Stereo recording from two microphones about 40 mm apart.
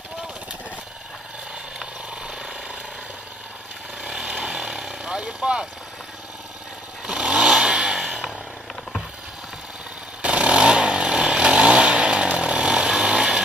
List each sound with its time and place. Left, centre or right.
1.8 s vehicle: centre
4.0 s chainsaw: right
5.2 s vehicle: centre
7.1 s vehicle: right
7.7 s a sound: right
10.2 s chainsaw: right